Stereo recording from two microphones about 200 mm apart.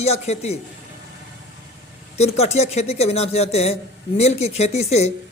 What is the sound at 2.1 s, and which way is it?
Speech, 30° left (ahead or behind).